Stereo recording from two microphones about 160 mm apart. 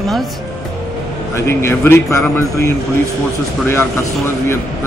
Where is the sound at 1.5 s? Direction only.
15° left (ahead or behind).